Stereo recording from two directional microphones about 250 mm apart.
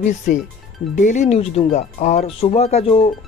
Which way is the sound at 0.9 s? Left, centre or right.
Left.